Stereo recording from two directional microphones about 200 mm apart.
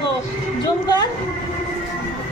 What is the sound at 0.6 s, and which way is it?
Speech, 20° left (ahead or behind).